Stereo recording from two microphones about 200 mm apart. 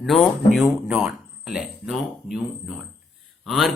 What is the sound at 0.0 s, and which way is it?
A man's voice, centre (ahead or behind).